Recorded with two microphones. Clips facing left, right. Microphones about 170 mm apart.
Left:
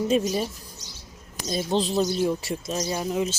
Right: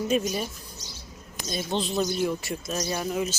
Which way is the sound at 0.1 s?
30° left (ahead or behind).